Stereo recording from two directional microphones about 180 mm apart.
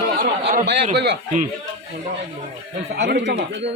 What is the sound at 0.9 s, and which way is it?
Speech, 65° right (ahead or behind).